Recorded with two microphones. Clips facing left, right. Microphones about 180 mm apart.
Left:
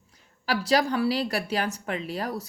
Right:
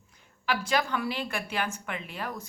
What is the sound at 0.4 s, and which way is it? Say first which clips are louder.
A woman's voice: left 5 dB; 35° left (ahead or behind).